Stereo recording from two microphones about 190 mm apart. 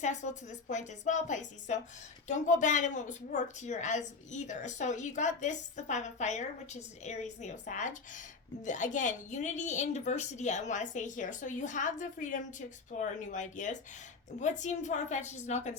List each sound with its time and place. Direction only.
0.0 s a woman's voice: 40° left (ahead or behind)